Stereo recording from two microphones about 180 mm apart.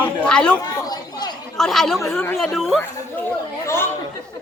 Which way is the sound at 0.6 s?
20° left (ahead or behind).